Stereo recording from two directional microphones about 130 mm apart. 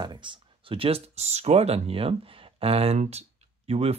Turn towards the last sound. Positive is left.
turn(degrees=-50)  # may be behind; listen again after turning